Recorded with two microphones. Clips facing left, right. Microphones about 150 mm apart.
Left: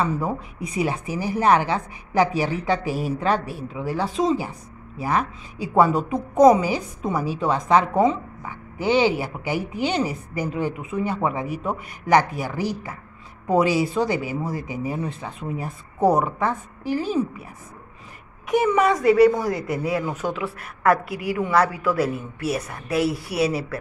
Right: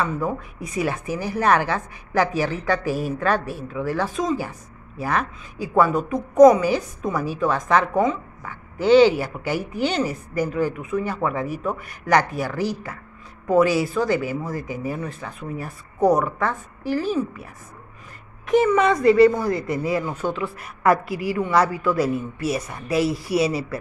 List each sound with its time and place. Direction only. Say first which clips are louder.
0.7 s a woman's voice: even; 15° left (ahead or behind)
4.2 s speech: left 5 dB; 25° left (ahead or behind)
5.8 s speech: left 1 dB; 30° left (ahead or behind)
8.5 s a woman's voice: right 6 dB; 15° left (ahead or behind)
18.5 s a woman's voice: right 2 dB; 10° left (ahead or behind)